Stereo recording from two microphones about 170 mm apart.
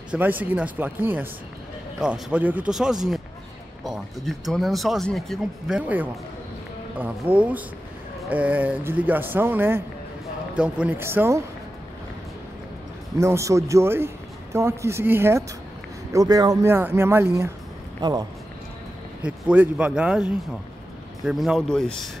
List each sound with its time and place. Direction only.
0.1 s a man's voice: 10° right (ahead or behind)
13.2 s a man's voice: 15° right (ahead or behind)
19.2 s speech: 5° right (ahead or behind)